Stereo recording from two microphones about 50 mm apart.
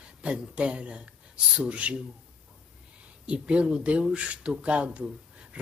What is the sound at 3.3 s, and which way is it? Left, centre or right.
Speech, right.